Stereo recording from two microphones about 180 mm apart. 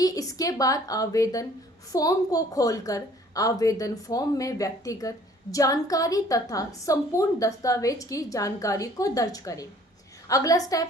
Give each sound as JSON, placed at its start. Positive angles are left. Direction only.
{"t": 0.0, "sound": "a woman's voice", "side_deg": 20}